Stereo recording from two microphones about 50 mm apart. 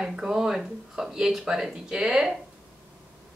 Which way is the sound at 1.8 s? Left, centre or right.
Centre.